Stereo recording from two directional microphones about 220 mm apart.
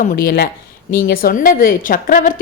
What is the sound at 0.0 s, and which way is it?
A woman's voice, 40° left (ahead or behind).